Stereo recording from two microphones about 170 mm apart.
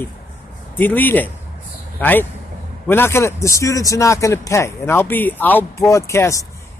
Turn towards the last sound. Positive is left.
turn(degrees=15)  # may be behind; listen again after turning